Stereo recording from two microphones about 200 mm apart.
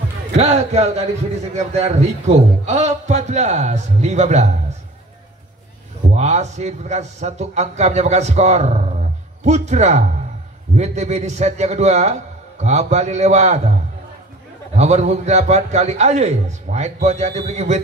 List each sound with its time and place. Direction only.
0.4 s a man's voice: 35° right (ahead or behind)
6.1 s a man's voice: 35° right (ahead or behind)
14.8 s a man's voice: 35° right (ahead or behind)